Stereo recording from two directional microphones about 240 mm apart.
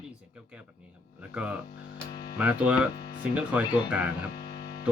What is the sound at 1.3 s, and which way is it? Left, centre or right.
Speech, centre.